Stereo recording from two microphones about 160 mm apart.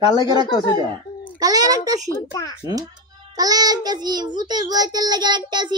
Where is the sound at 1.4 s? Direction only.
25° right (ahead or behind).